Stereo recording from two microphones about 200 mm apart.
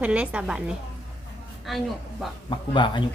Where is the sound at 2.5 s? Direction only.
25° left (ahead or behind).